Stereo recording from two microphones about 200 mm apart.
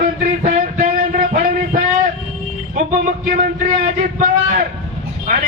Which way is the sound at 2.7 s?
40° right (ahead or behind).